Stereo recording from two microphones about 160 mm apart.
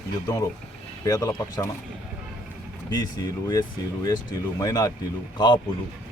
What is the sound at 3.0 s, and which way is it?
Speech, 20° left (ahead or behind).